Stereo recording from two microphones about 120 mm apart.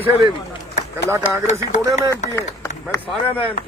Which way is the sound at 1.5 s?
75° left (ahead or behind).